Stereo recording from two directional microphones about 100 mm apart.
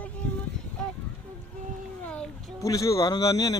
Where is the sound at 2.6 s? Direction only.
35° left (ahead or behind).